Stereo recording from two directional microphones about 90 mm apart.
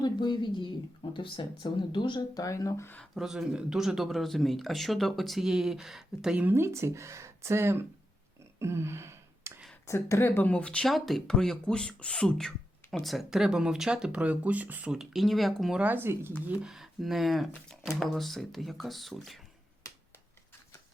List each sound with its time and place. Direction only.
0.0 s a woman's voice: 55° left (ahead or behind); by 2.8 s 40° left (ahead or behind)
3.2 s speech: 5° right (ahead or behind)
6.4 s speech: 25° right (ahead or behind)
8.5 s a sound: 30° right (ahead or behind)
9.8 s speech: 30° left (ahead or behind); by 10.8 s 15° left (ahead or behind)
10.8 s speech: centre (ahead or behind)
15.8 s speech: 20° right (ahead or behind)
16.6 s speech: 5° right (ahead or behind)